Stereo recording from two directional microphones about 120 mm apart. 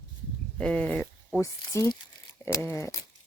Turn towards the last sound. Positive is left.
turn(degrees=25)  # may be behind; listen again after turning